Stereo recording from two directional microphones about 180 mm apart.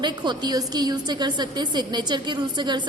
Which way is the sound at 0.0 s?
25° right (ahead or behind).